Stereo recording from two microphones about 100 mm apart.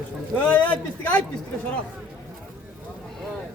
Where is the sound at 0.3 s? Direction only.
15° left (ahead or behind).